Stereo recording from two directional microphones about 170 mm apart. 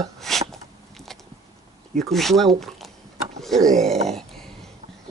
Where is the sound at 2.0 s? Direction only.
Centre (ahead or behind).